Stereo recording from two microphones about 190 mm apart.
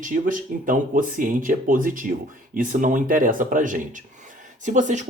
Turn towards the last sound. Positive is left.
turn(degrees=-40)  # may be behind; listen again after turning